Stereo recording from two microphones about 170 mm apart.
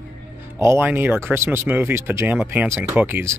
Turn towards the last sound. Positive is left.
turn(degrees=-10)  # may be behind; listen again after turning